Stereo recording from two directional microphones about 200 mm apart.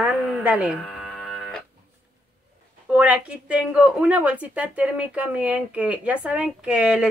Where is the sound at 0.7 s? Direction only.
5° left (ahead or behind).